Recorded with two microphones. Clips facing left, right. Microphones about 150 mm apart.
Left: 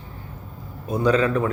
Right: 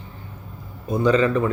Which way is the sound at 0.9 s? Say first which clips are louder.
Right 1 dB; 10° left (ahead or behind).